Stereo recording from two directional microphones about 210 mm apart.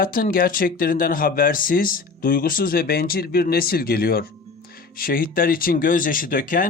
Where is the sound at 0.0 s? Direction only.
40° left (ahead or behind).